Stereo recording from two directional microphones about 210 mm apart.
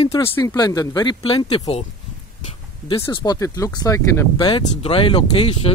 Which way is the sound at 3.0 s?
20° left (ahead or behind).